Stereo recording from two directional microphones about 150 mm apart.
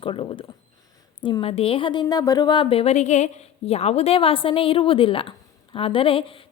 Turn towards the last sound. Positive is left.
turn(degrees=35)  # may be behind; listen again after turning